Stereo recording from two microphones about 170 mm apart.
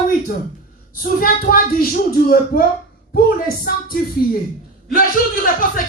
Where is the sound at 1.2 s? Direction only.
55° left (ahead or behind).